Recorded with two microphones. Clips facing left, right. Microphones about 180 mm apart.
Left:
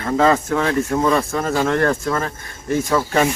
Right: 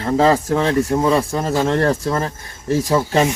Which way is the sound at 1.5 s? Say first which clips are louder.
Right 1 dB; 25° right (ahead or behind).